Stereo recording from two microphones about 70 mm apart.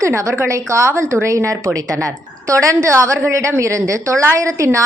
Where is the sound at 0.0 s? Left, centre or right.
Right.